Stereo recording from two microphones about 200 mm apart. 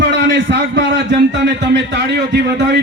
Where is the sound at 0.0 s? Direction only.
60° right (ahead or behind).